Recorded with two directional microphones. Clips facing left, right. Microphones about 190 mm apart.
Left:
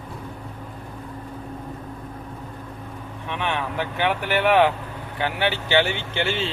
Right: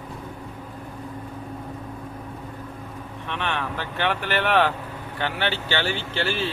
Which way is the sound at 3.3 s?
15° left (ahead or behind).